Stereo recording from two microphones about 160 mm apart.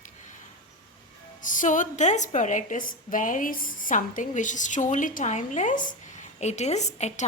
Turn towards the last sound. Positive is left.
turn(degrees=45)  # may be behind; listen again after turning